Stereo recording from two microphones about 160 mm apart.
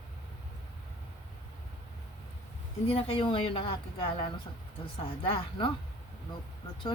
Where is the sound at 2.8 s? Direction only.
35° left (ahead or behind).